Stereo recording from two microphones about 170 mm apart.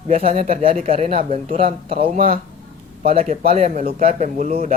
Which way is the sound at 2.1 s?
55° right (ahead or behind).